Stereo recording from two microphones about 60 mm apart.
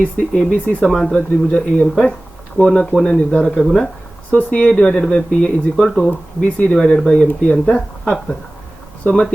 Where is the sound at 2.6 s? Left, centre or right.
Right.